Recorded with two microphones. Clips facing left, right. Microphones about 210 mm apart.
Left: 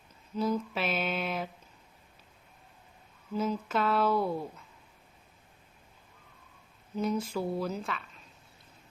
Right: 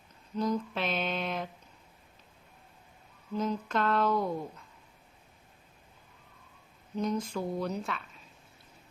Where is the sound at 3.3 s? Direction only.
5° left (ahead or behind).